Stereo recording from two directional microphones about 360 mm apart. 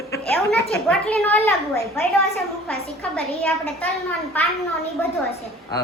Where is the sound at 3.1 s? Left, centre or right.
Centre.